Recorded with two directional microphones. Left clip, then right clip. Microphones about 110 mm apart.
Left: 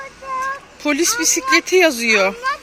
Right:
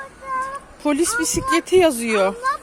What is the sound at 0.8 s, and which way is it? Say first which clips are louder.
Speech: left 3 dB; 15° right (ahead or behind).